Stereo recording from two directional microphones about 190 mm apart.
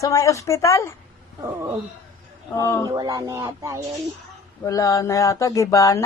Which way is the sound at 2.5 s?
15° left (ahead or behind).